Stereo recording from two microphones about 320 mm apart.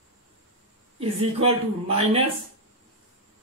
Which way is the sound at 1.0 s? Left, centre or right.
Centre.